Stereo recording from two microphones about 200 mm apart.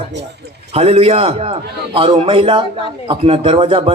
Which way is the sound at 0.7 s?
30° right (ahead or behind).